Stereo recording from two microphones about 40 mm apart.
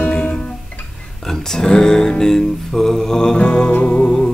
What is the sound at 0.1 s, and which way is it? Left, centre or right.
Music, left.